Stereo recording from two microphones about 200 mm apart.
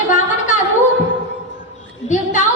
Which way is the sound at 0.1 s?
40° left (ahead or behind).